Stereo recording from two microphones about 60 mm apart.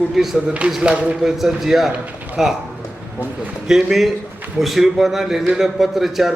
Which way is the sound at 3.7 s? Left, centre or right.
Centre.